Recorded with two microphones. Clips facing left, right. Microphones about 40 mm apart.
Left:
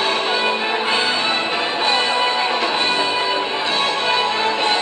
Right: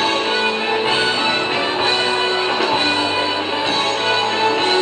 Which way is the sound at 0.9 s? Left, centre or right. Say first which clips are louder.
Right 1 dB; right.